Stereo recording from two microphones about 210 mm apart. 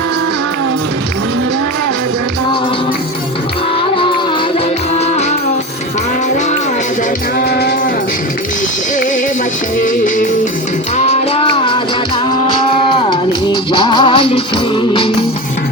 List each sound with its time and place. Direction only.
7.3 s music: 50° left (ahead or behind)
9.7 s music: 40° left (ahead or behind)